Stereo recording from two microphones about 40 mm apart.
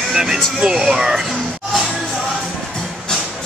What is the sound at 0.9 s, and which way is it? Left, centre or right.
Speech, centre.